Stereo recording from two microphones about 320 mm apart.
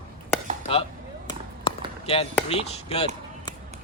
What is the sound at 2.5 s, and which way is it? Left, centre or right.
Speech, centre.